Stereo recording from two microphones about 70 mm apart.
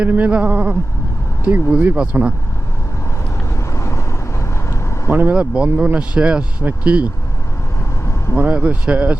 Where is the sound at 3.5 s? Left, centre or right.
Left.